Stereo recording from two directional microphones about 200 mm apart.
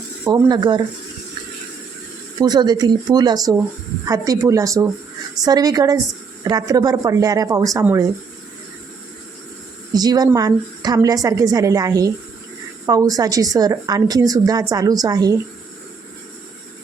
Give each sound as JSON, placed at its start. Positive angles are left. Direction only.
{"t": 0.3, "sound": "speech", "side_deg": -20}
{"t": 2.4, "sound": "a woman's voice", "side_deg": -20}
{"t": 9.9, "sound": "a woman's voice", "side_deg": -20}